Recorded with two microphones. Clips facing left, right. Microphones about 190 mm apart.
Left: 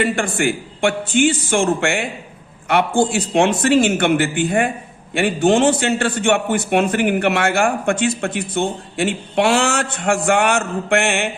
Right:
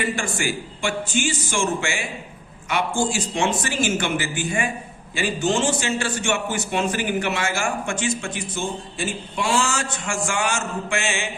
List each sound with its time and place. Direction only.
0.0 s a man's voice: 60° left (ahead or behind)